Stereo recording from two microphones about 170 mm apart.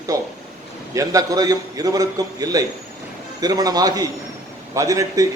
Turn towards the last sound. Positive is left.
turn(degrees=-20)  # may be behind; listen again after turning